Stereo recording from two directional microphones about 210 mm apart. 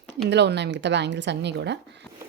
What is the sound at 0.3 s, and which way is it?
A woman's voice, 55° right (ahead or behind).